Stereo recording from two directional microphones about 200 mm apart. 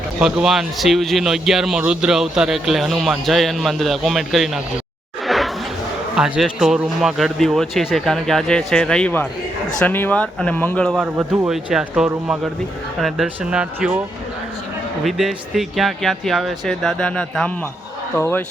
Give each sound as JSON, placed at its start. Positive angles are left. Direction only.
{"t": 0.2, "sound": "speech", "side_deg": -5}
{"t": 5.2, "sound": "a sound", "side_deg": 0}
{"t": 6.1, "sound": "speech", "side_deg": -5}
{"t": 15.0, "sound": "speech", "side_deg": 0}